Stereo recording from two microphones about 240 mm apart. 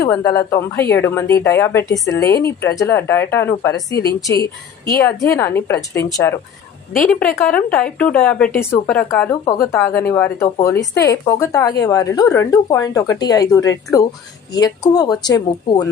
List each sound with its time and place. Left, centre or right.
0.0 s a woman's voice: centre